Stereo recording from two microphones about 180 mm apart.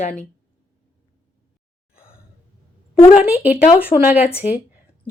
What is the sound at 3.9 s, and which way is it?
Speech, 30° left (ahead or behind).